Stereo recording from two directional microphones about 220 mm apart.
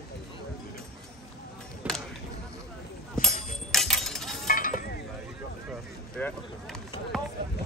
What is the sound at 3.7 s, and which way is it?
Music, centre (ahead or behind).